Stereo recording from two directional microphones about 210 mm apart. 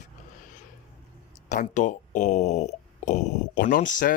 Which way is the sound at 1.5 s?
35° left (ahead or behind).